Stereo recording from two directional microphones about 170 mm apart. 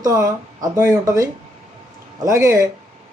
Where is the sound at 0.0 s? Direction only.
20° right (ahead or behind).